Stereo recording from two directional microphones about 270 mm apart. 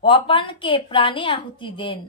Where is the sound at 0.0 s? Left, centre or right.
Centre.